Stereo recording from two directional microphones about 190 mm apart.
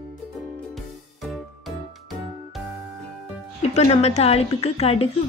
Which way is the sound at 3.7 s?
35° left (ahead or behind).